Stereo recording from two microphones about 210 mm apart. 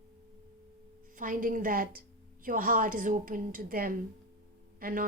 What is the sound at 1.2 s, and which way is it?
A woman's voice, 40° right (ahead or behind).